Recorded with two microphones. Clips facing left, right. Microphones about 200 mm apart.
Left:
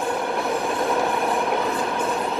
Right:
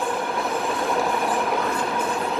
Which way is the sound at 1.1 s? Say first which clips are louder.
Left 1 dB; centre (ahead or behind).